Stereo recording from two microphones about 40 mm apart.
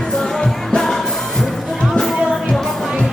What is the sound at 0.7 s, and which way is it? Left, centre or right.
Music, centre.